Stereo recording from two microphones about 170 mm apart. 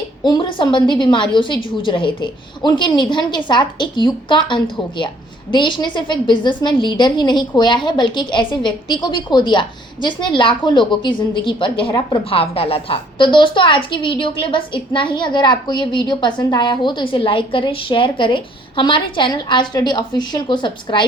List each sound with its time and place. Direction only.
0.2 s a woman's voice: 30° left (ahead or behind)